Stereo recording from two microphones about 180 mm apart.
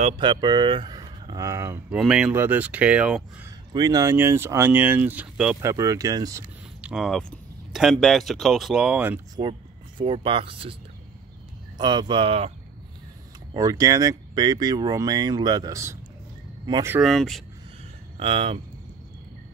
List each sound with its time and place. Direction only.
0.2 s speech: 25° right (ahead or behind)
2.0 s speech: 5° right (ahead or behind)
3.4 s speech: 20° right (ahead or behind)
5.7 s speech: 20° right (ahead or behind)
6.8 s speech: 5° right (ahead or behind)
9.4 s speech: 30° right (ahead or behind)
11.8 s speech: 25° right (ahead or behind)
13.5 s speech: 20° right (ahead or behind)
16.9 s speech: centre (ahead or behind)
18.2 s speech: 30° right (ahead or behind)